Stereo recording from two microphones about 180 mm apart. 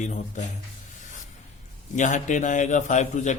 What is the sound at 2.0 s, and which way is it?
A man's voice, 45° left (ahead or behind).